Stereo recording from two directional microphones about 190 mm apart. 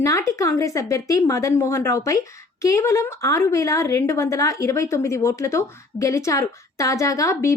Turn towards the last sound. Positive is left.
turn(degrees=15)  # may be behind; listen again after turning